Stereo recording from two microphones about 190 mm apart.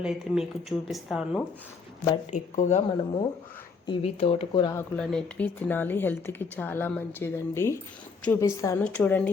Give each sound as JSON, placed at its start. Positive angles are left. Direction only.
{"t": 0.0, "sound": "speech", "side_deg": -5}
{"t": 2.3, "sound": "speech", "side_deg": 40}
{"t": 4.9, "sound": "speech", "side_deg": 5}